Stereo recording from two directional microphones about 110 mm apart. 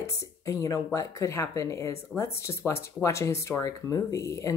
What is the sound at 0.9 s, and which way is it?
Speech, 30° left (ahead or behind).